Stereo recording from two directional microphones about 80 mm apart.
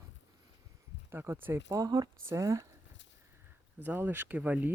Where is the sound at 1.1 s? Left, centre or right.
Right.